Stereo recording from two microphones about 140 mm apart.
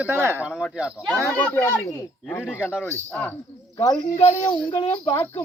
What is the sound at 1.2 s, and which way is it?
Speech, 20° left (ahead or behind).